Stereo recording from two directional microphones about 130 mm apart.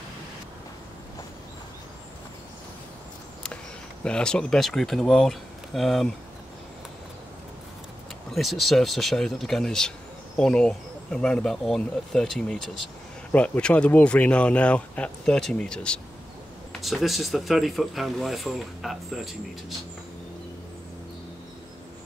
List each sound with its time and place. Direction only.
4.0 s speech: 5° left (ahead or behind)
8.3 s speech: centre (ahead or behind)